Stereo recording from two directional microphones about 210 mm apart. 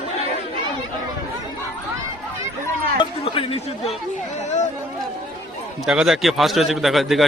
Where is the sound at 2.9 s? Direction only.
25° left (ahead or behind).